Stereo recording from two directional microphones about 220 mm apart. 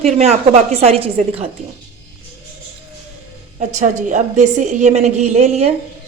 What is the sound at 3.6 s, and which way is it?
A woman's voice, 35° right (ahead or behind).